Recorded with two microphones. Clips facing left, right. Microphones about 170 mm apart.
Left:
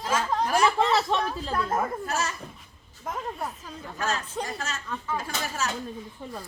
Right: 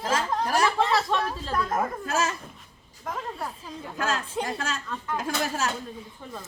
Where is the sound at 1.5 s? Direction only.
30° left (ahead or behind).